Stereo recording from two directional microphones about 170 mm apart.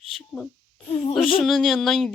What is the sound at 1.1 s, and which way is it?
A woman's voice, centre (ahead or behind).